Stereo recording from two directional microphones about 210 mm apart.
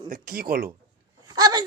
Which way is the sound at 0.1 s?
45° right (ahead or behind).